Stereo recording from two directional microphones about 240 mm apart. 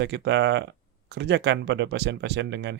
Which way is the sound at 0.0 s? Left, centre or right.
Right.